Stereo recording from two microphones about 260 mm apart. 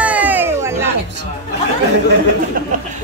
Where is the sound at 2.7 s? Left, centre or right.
Right.